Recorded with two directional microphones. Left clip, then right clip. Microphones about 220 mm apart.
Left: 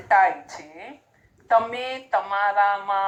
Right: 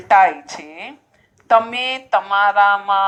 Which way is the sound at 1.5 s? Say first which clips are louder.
Right 6 dB; 40° right (ahead or behind).